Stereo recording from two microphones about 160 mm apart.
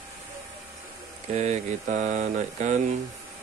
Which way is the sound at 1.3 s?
45° right (ahead or behind).